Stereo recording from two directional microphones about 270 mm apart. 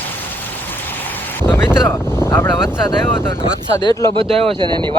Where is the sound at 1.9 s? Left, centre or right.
Centre.